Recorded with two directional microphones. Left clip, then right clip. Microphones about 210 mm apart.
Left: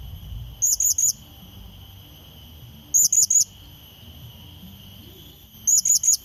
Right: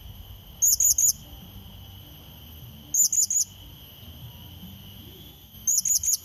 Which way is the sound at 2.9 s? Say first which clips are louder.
Left 5 dB; 10° left (ahead or behind).